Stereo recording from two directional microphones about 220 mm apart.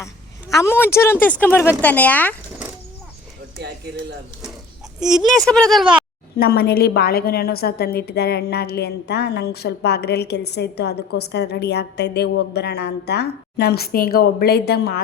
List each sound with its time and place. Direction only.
0.5 s speech: 10° left (ahead or behind)
4.9 s speech: 5° right (ahead or behind)
6.3 s a woman's voice: 45° left (ahead or behind)